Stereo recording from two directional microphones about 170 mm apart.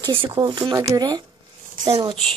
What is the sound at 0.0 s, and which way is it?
Speech, 30° right (ahead or behind).